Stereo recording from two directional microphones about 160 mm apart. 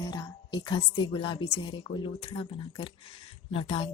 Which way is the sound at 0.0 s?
25° left (ahead or behind).